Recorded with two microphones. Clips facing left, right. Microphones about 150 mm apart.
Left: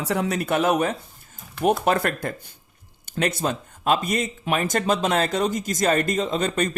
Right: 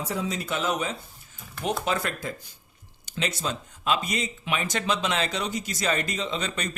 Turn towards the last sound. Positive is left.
turn(degrees=45)  # may be behind; listen again after turning